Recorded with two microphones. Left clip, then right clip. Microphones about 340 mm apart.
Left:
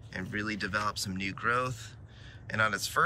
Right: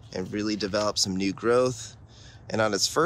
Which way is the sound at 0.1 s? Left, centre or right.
Centre.